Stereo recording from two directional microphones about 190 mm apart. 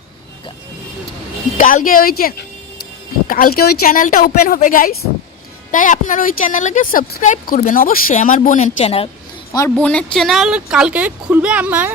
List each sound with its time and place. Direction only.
1.5 s a woman's voice: 45° left (ahead or behind)
9.5 s speech: 15° left (ahead or behind)
9.7 s speech: 5° left (ahead or behind)